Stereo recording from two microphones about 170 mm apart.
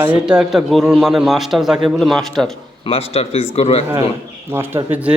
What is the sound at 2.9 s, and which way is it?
Speech, 35° left (ahead or behind).